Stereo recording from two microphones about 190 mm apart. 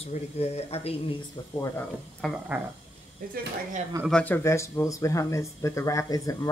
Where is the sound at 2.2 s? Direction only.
5° right (ahead or behind).